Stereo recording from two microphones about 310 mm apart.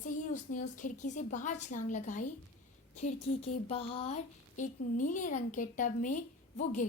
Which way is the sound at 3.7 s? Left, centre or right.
Centre.